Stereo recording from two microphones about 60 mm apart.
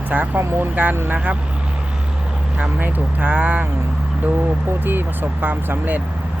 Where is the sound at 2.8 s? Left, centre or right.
Right.